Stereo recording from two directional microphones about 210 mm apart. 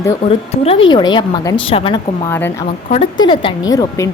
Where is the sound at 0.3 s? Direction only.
25° left (ahead or behind).